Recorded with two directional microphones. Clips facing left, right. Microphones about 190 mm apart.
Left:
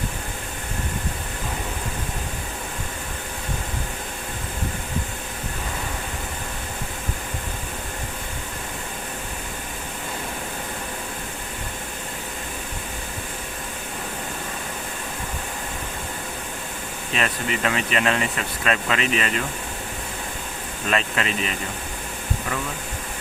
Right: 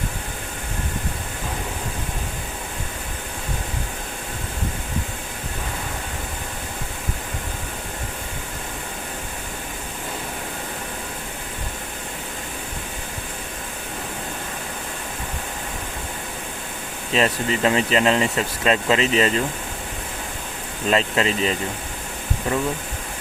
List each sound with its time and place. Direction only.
17.1 s speech: 25° right (ahead or behind)
20.9 s speech: 30° right (ahead or behind)